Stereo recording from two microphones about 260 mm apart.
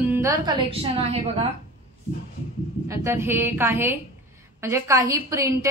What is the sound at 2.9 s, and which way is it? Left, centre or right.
Speech, centre.